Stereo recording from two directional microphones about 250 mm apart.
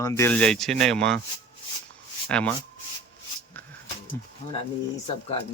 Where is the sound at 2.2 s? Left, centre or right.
Centre.